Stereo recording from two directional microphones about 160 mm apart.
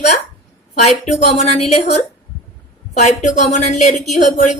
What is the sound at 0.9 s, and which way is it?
A woman's voice, 45° left (ahead or behind).